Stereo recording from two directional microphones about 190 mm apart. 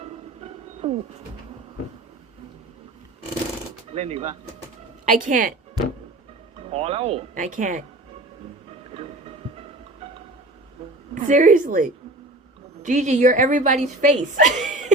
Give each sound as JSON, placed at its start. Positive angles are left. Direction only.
{"t": 0.0, "sound": "music", "side_deg": -30}
{"t": 3.9, "sound": "a woman's voice", "side_deg": -35}
{"t": 5.0, "sound": "a woman's voice", "side_deg": -45}
{"t": 6.7, "sound": "a woman's voice", "side_deg": -30}
{"t": 7.3, "sound": "a woman's voice", "side_deg": -40}
{"t": 11.1, "sound": "a woman's voice", "side_deg": -45}